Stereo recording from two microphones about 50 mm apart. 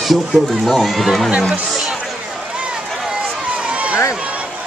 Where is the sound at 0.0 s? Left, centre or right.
Centre.